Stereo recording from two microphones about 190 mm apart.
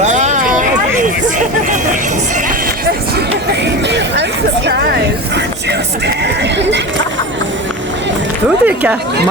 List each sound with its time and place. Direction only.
0.0 s a sound: 40° right (ahead or behind)
3.8 s speech: 65° right (ahead or behind)
6.4 s speech: 65° right (ahead or behind)
8.6 s speech: 10° right (ahead or behind)